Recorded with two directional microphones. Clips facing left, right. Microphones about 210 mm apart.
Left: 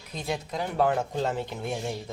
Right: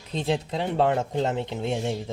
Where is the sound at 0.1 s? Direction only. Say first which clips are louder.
Right 6 dB; 30° right (ahead or behind).